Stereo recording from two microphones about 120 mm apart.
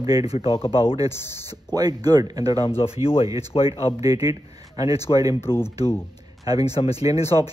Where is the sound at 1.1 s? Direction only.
20° left (ahead or behind).